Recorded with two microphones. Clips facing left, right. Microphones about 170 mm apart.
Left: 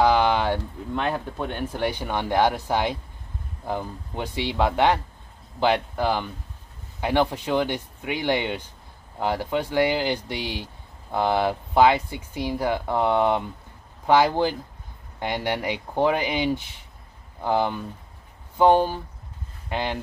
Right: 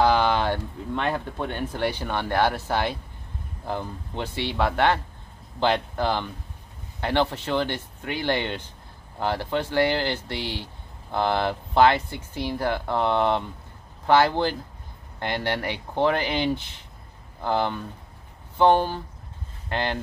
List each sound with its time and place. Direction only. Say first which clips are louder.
0.0 s speech: left 1 dB; 10° left (ahead or behind)